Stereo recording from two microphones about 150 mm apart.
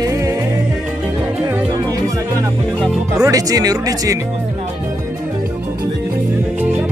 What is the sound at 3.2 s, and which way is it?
Speech, 25° right (ahead or behind).